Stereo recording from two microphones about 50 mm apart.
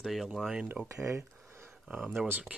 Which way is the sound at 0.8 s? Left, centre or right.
Right.